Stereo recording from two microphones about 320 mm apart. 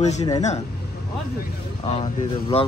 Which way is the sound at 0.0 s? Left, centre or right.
Left.